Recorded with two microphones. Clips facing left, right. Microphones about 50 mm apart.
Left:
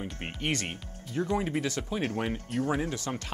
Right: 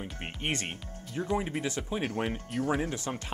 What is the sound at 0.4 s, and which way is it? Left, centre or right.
Speech, right.